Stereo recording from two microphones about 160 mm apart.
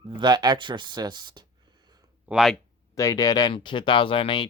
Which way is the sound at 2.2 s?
5° right (ahead or behind).